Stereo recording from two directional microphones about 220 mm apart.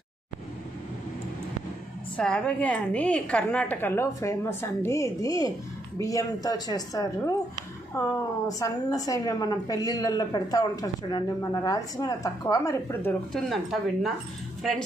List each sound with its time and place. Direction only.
2.1 s a woman's voice: 5° left (ahead or behind)
13.3 s speech: centre (ahead or behind)